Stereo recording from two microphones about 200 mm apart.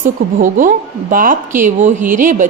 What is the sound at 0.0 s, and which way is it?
A woman's voice, 40° right (ahead or behind).